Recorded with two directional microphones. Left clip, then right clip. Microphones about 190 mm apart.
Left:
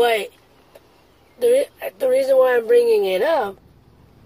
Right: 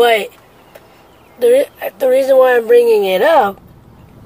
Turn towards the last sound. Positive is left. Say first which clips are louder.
# right 8 dB
turn(degrees=0)  # may be behind; listen again after turning